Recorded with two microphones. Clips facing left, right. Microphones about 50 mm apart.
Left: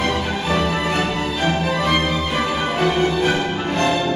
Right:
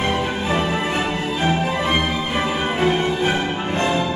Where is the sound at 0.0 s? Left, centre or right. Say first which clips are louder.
Even; right.